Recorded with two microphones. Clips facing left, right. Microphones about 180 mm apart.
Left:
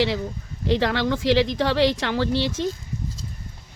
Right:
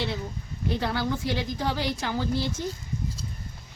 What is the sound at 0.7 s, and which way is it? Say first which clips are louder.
Speech: left 6 dB; 90° left.